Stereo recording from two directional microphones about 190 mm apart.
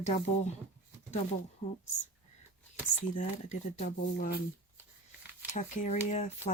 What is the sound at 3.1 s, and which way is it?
Speech, 40° left (ahead or behind).